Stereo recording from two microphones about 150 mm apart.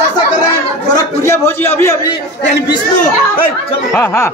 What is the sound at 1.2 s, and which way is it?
Speech, 15° left (ahead or behind).